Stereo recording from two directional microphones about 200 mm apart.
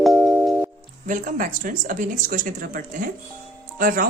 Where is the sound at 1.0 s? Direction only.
40° right (ahead or behind).